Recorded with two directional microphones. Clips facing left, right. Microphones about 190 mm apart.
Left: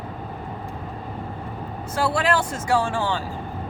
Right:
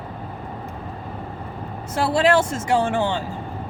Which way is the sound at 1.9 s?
25° right (ahead or behind).